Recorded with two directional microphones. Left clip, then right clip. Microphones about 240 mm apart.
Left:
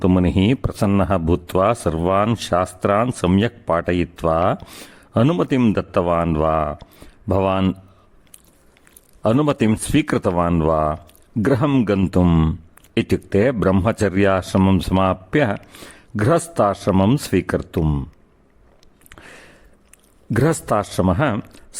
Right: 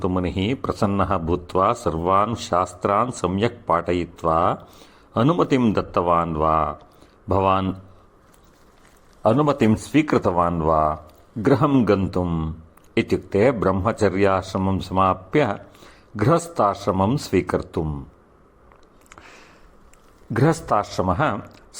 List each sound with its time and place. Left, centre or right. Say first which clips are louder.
0.0 s speech: left 5 dB; left
9.2 s speech: even; left
11.0 s a sound: left 1 dB; left
11.6 s a man's voice: even; left
19.1 s a sound: left 3 dB; left
20.9 s speech: left 2 dB; left